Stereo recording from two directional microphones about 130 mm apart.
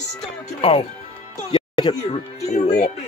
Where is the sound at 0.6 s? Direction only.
50° left (ahead or behind).